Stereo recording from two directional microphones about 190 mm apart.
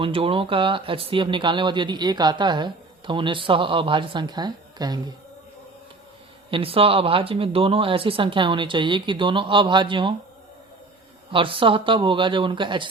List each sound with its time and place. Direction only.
0.0 s speech: 30° right (ahead or behind)
6.5 s speech: 30° right (ahead or behind)
11.3 s speech: 25° right (ahead or behind)